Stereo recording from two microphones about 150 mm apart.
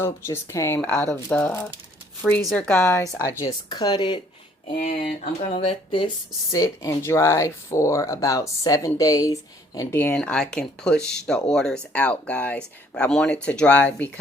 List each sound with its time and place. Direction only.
0.0 s speech: 20° left (ahead or behind)
5.5 s speech: 35° left (ahead or behind)
6.5 s speech: 20° left (ahead or behind)